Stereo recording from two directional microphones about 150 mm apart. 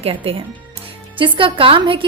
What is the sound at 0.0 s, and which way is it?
A woman's voice, 40° right (ahead or behind).